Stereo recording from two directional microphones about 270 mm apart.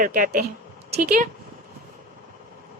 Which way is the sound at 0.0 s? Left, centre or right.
Right.